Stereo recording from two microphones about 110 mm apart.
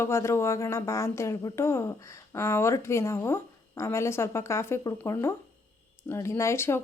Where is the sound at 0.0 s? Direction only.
25° left (ahead or behind).